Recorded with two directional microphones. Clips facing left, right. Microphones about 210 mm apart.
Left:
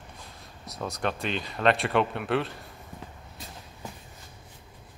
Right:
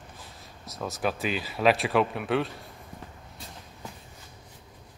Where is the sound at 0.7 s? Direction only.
Centre (ahead or behind).